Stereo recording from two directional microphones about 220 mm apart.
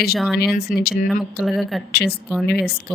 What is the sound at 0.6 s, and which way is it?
Speech, 45° left (ahead or behind).